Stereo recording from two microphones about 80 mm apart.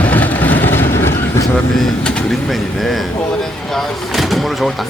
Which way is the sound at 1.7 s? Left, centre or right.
Centre.